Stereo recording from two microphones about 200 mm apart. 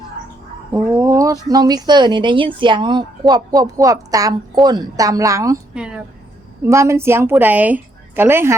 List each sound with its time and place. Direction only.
0.7 s a woman's voice: 15° right (ahead or behind)
5.7 s a woman's voice: 5° right (ahead or behind)